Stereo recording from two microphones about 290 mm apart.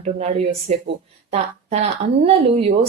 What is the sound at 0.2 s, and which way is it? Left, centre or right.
Speech, right.